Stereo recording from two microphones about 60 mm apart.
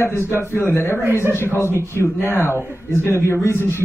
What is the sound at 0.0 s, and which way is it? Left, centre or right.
A man's voice, left.